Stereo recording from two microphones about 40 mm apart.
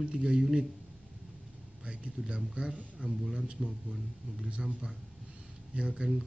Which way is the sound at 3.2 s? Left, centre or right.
Centre.